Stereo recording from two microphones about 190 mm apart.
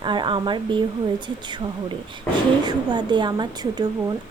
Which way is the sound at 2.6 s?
20° right (ahead or behind).